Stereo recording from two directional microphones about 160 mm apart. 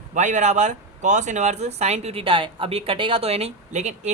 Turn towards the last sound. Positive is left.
turn(degrees=-45)  # may be behind; listen again after turning